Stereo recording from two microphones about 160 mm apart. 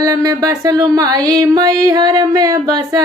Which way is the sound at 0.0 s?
20° right (ahead or behind).